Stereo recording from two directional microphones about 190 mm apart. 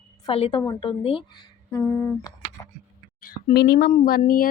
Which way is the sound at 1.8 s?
15° left (ahead or behind).